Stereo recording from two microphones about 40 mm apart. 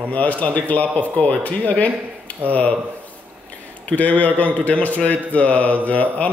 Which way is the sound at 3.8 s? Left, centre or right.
Left.